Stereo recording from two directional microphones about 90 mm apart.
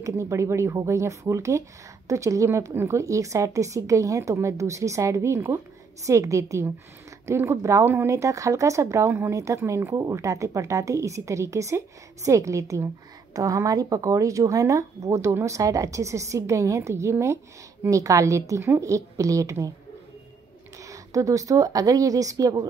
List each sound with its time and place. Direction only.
0.0 s speech: 35° right (ahead or behind)
20.8 s speech: 40° right (ahead or behind)